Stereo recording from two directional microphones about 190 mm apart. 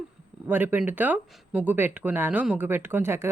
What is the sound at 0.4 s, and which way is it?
Speech, 10° right (ahead or behind).